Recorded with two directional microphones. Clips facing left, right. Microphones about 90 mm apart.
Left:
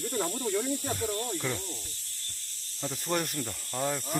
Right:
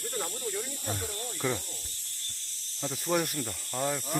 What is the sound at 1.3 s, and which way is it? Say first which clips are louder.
Speech: right 2 dB; 10° right (ahead or behind).